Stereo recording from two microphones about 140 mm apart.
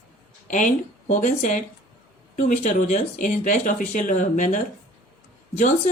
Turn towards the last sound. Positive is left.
turn(degrees=60)  # may be behind; listen again after turning